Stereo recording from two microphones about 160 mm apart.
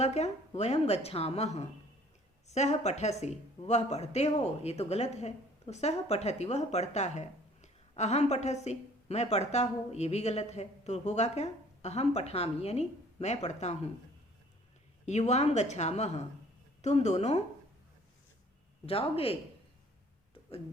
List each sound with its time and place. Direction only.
0.0 s speech: 45° left (ahead or behind)
15.0 s speech: 45° left (ahead or behind)
18.9 s speech: 35° left (ahead or behind)